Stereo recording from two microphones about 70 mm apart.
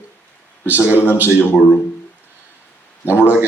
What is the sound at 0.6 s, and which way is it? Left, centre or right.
Speech, right.